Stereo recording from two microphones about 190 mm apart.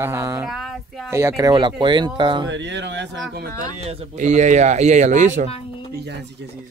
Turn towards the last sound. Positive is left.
turn(degrees=-60)  # may be behind; listen again after turning